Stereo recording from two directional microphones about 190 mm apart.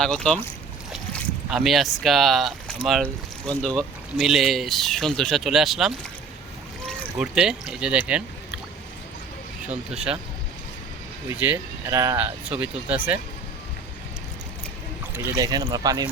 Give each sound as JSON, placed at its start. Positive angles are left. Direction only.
{"t": 0.0, "sound": "speech", "side_deg": 5}
{"t": 11.3, "sound": "speech", "side_deg": -15}
{"t": 15.4, "sound": "speech", "side_deg": -20}